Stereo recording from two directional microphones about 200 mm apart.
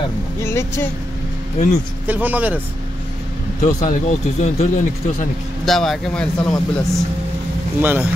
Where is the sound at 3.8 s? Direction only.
35° left (ahead or behind).